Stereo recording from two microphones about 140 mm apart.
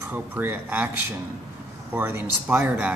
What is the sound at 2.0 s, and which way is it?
Speech, 15° right (ahead or behind).